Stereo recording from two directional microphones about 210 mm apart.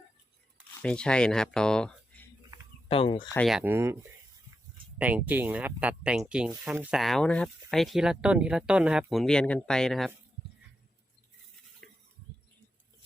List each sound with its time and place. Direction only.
0.8 s speech: 5° left (ahead or behind)
2.9 s speech: 25° left (ahead or behind)
3.3 s speech: centre (ahead or behind)
3.6 s speech: 10° right (ahead or behind)
4.9 s speech: 5° right (ahead or behind)